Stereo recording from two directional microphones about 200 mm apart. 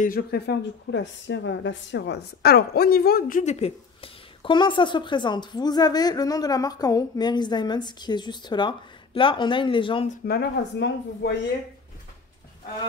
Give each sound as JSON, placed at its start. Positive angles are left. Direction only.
{"t": 0.0, "sound": "a woman's voice", "side_deg": 50}
{"t": 10.0, "sound": "speech", "side_deg": 50}